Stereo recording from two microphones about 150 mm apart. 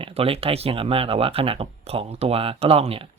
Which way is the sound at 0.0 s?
40° right (ahead or behind).